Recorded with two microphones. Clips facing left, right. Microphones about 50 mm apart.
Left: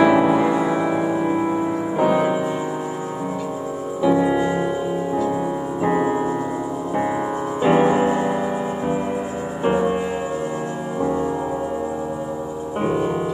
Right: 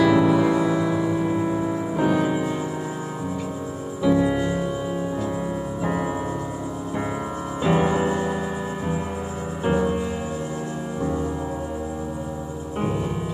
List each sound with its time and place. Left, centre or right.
0.0 s music: left
4.0 s music: centre
5.8 s music: left
7.6 s music: left
9.7 s music: left
12.8 s music: centre